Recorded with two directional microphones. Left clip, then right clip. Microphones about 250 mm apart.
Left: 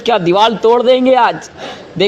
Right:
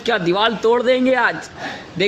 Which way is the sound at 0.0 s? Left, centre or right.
Centre.